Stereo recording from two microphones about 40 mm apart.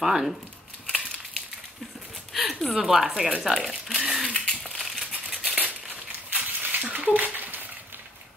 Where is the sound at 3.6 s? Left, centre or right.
Centre.